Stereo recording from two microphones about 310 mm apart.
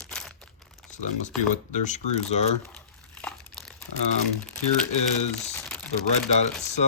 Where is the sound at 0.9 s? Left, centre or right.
Left.